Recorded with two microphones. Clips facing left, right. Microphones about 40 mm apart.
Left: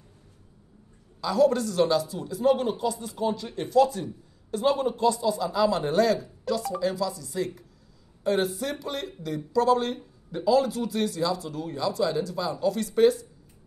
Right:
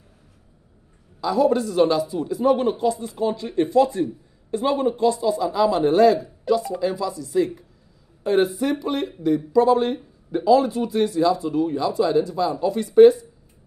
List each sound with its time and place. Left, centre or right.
1.2 s speech: right